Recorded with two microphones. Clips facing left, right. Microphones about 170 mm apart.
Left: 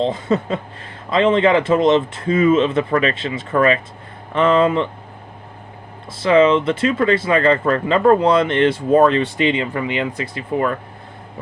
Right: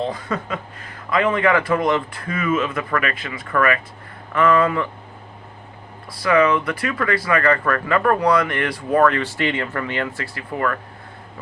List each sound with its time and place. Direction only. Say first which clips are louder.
0.0 s speech: left 6 dB; 25° left (ahead or behind)
6.1 s speech: left 4 dB; 25° left (ahead or behind)